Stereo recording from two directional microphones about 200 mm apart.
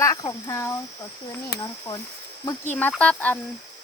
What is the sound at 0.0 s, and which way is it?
Speech, 15° left (ahead or behind).